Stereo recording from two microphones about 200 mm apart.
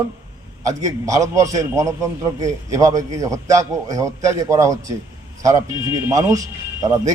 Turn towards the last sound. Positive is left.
turn(degrees=-15)  # may be behind; listen again after turning